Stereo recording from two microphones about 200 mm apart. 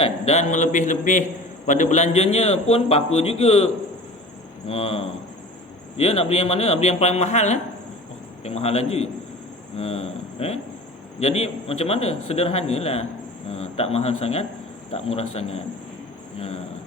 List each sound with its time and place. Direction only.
0.0 s a man's voice: 30° left (ahead or behind)
4.7 s a man's voice: 30° left (ahead or behind)